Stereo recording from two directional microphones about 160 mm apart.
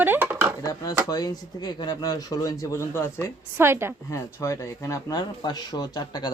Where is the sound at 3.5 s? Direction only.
15° right (ahead or behind).